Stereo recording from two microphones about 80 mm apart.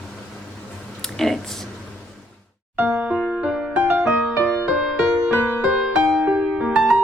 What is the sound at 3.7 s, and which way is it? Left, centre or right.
Music, right.